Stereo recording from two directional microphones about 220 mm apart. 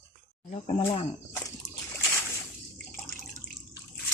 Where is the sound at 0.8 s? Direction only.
15° left (ahead or behind).